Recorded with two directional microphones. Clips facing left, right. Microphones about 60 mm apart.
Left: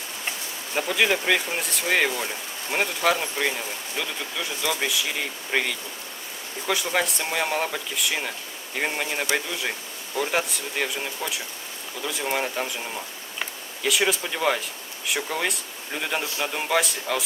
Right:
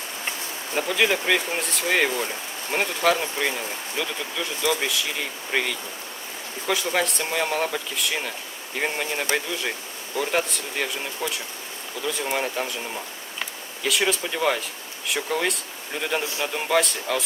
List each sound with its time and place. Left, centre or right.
0.8 s speech: centre